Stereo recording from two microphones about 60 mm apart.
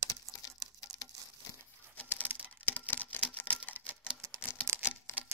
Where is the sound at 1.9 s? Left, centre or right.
Left.